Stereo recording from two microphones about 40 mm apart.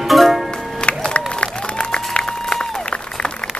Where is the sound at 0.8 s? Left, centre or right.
Left.